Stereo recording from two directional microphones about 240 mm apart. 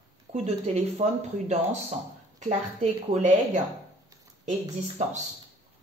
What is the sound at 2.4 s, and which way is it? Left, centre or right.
A man's voice, right.